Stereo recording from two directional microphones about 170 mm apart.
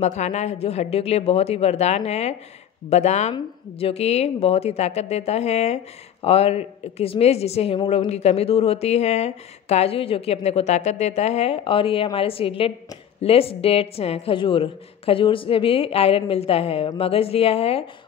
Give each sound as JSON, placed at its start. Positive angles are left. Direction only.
{"t": 0.0, "sound": "speech", "side_deg": 40}